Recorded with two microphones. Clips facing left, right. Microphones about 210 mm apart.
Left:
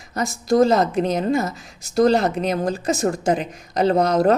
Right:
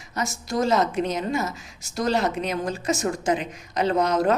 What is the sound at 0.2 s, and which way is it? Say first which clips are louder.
Speech: left 8 dB; 35° left (ahead or behind).